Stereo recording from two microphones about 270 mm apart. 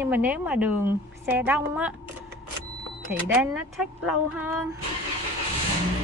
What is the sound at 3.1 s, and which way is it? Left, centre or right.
A woman's voice, centre.